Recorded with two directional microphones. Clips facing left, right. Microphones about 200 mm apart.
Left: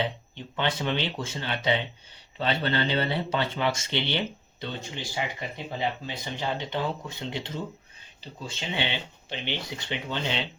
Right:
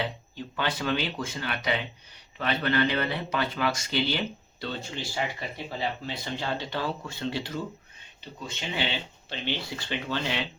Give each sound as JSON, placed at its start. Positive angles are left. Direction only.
{"t": 0.0, "sound": "speech", "side_deg": 25}
{"t": 8.2, "sound": "speech", "side_deg": 30}
{"t": 9.3, "sound": "speech", "side_deg": 15}